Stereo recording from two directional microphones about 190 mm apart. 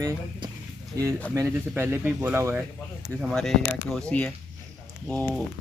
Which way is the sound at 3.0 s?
Centre (ahead or behind).